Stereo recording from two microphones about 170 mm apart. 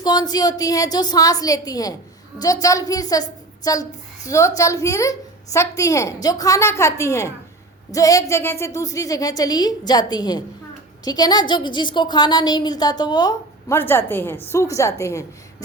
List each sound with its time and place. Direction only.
0.0 s a woman's voice: 25° left (ahead or behind)